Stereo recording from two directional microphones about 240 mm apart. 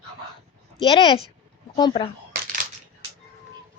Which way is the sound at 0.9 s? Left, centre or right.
Left.